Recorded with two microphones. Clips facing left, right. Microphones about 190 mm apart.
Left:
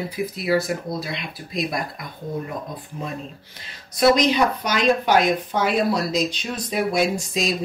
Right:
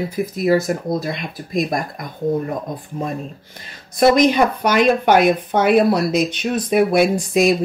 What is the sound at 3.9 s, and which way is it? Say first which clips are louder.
Speech: right 4 dB; 50° right (ahead or behind).